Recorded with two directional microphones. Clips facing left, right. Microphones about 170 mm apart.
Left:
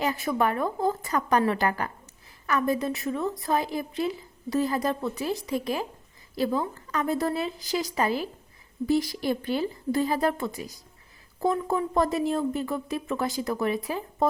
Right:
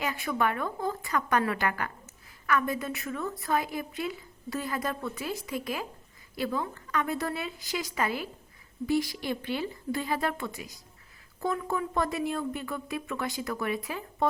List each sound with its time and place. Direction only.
0.0 s a woman's voice: 35° left (ahead or behind)